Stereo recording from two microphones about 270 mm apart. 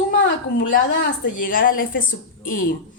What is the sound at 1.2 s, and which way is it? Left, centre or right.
A woman's voice, left.